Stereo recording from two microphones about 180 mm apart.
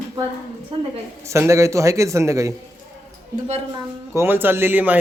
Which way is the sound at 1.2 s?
15° right (ahead or behind).